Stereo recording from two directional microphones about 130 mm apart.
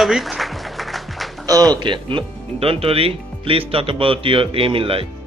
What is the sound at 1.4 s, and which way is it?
Speech, 30° right (ahead or behind).